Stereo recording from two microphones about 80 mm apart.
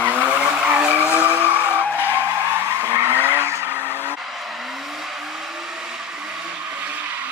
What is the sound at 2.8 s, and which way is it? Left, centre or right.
Vehicle, right.